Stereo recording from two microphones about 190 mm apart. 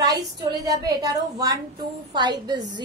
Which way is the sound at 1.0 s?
20° right (ahead or behind).